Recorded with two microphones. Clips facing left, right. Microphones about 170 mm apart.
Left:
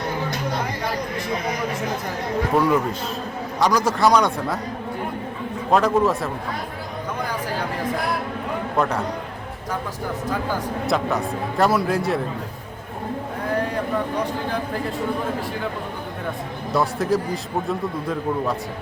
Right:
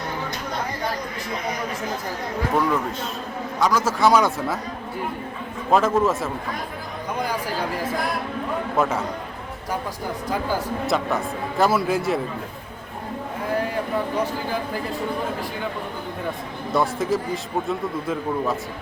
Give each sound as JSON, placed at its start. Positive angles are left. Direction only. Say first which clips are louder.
{"t": 2.5, "sound": "a man's voice", "louder": "left 3 dB", "side_deg": 0}
{"t": 5.7, "sound": "a man's voice", "louder": "left 1 dB", "side_deg": 0}
{"t": 10.8, "sound": "a man's voice", "louder": "left 2 dB", "side_deg": 0}
{"t": 16.7, "sound": "a man's voice", "louder": "left 1 dB", "side_deg": 0}